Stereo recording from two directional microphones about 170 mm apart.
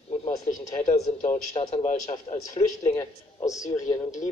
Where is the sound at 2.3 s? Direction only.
35° left (ahead or behind).